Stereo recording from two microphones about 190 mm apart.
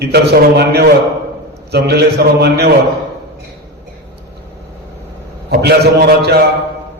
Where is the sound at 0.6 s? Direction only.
60° right (ahead or behind).